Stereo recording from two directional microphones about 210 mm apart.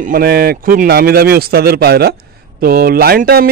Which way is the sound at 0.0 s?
45° right (ahead or behind).